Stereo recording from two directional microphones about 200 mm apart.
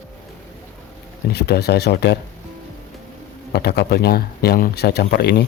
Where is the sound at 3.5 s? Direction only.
55° left (ahead or behind).